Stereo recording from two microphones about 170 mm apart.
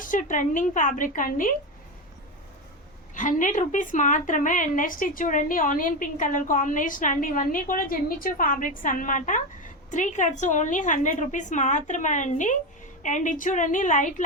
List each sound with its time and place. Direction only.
0.0 s a woman's voice: 50° left (ahead or behind)
3.2 s a woman's voice: 50° left (ahead or behind)